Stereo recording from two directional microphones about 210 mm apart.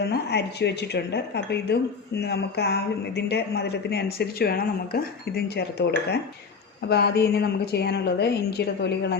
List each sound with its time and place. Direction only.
0.0 s speech: 50° left (ahead or behind)
6.8 s speech: 50° left (ahead or behind)